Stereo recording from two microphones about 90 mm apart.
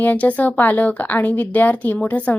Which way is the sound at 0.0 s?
20° left (ahead or behind).